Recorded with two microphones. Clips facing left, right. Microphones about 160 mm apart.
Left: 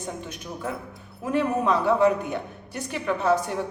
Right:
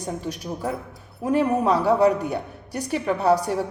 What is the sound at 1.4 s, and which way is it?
A woman's voice, 40° right (ahead or behind).